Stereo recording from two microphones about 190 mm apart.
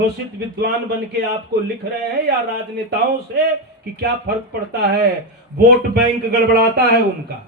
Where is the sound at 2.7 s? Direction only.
60° right (ahead or behind).